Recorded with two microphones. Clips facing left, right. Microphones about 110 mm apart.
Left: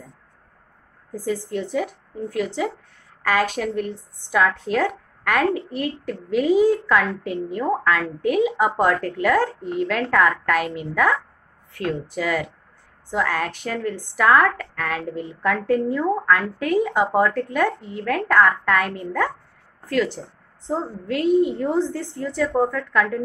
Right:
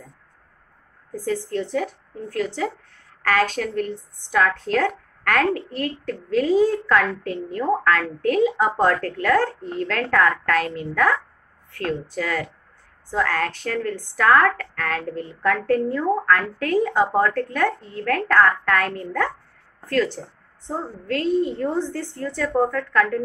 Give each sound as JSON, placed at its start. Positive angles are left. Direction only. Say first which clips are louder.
{"t": 1.1, "sound": "a woman's voice", "louder": "right 1 dB", "side_deg": 15}